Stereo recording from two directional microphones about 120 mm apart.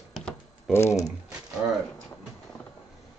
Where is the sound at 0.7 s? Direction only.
20° left (ahead or behind).